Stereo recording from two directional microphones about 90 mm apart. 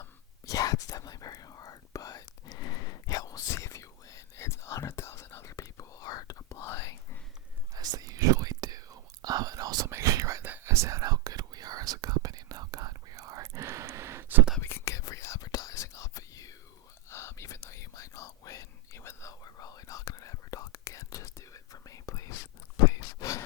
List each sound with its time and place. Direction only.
0.4 s whispering: 40° left (ahead or behind)
7.7 s whispering: 45° right (ahead or behind)
10.4 s whispering: 25° right (ahead or behind)
14.6 s whispering: 25° left (ahead or behind)